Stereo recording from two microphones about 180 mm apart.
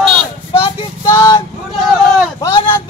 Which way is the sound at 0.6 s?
25° left (ahead or behind).